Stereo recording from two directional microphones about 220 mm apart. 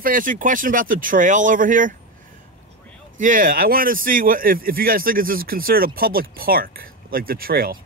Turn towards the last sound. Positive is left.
turn(degrees=-40)  # may be behind; listen again after turning